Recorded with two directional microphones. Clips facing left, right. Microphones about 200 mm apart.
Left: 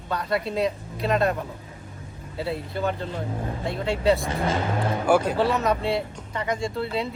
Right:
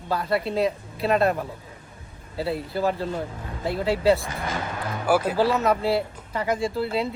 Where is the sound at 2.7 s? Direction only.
35° right (ahead or behind).